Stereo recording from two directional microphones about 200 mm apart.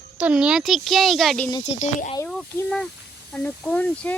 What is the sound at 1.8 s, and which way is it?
Speech, 35° left (ahead or behind).